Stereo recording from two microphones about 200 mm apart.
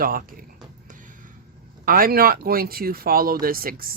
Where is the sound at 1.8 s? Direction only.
45° right (ahead or behind).